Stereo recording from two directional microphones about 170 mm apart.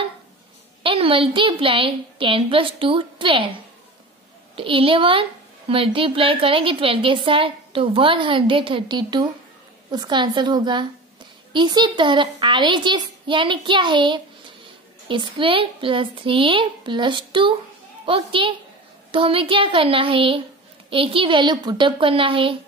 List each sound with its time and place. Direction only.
0.8 s a woman's voice: 30° right (ahead or behind)
4.6 s a woman's voice: 30° right (ahead or behind)